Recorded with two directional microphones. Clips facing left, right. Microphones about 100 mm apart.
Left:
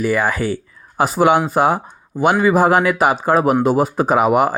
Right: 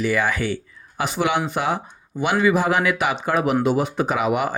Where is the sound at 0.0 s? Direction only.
40° left (ahead or behind).